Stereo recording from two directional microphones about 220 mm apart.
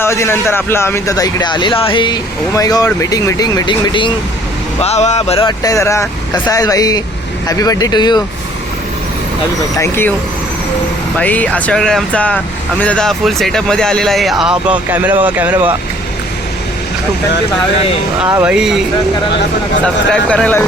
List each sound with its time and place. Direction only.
0.0 s a man's voice: 10° left (ahead or behind)
9.8 s a man's voice: 10° left (ahead or behind)
11.2 s speech: 5° left (ahead or behind)
18.3 s speech: 10° right (ahead or behind)
20.1 s speech: 5° left (ahead or behind)